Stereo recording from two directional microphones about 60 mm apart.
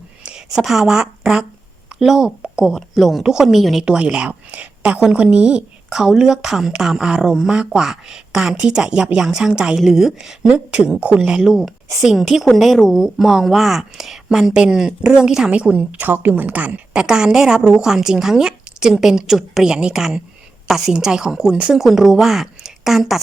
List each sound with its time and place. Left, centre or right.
0.2 s a sound: centre
0.5 s a woman's voice: centre
3.8 s a woman's voice: centre
10.4 s a woman's voice: centre
10.8 s a woman's voice: centre